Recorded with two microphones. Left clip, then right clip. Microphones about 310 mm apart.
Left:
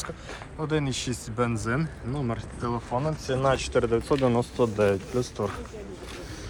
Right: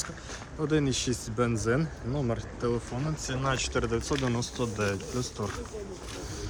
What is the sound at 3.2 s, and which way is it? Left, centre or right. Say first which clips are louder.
Speech: left 4 dB; centre.